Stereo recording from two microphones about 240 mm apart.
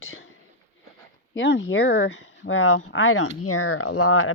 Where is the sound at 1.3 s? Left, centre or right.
Left.